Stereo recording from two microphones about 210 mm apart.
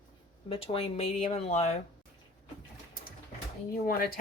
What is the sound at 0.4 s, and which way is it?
Speech, 25° left (ahead or behind).